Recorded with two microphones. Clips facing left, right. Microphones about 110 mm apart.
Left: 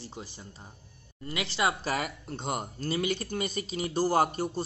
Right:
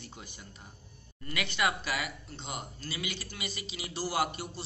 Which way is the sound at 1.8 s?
45° left (ahead or behind).